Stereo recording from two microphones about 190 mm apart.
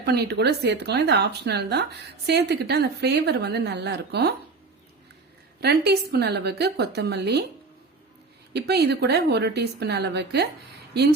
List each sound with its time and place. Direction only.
0.0 s speech: 60° right (ahead or behind)
5.5 s speech: 60° right (ahead or behind)
8.5 s speech: 60° right (ahead or behind)